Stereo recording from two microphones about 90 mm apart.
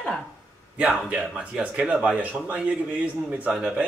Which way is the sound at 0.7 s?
10° right (ahead or behind).